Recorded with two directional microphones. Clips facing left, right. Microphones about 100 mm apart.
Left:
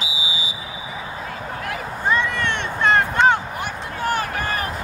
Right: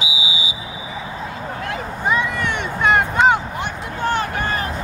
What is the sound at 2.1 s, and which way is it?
Vehicle, 5° right (ahead or behind).